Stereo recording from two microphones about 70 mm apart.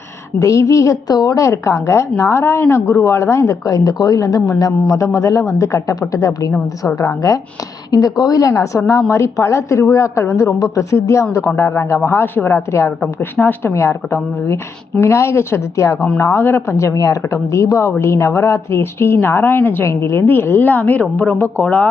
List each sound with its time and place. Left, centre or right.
0.3 s speech: left
2.4 s speech: left
7.9 s a woman's voice: left
16.7 s a woman's voice: left
20.2 s a woman's voice: left